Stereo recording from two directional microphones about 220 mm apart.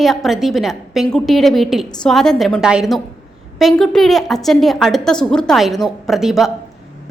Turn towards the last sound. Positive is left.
turn(degrees=0)  # may be behind; listen again after turning